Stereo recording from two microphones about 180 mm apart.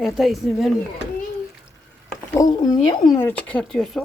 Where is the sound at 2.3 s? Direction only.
20° left (ahead or behind).